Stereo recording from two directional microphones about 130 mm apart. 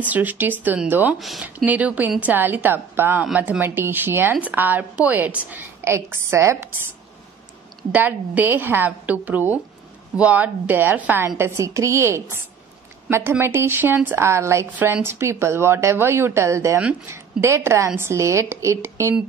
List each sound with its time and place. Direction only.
0.0 s a woman's voice: 10° right (ahead or behind)
7.9 s a woman's voice: 15° right (ahead or behind)